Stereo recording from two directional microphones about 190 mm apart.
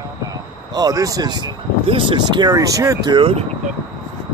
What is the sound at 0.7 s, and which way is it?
Speech, 20° right (ahead or behind).